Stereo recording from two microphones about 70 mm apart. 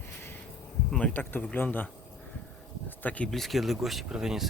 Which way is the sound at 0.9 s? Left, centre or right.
Centre.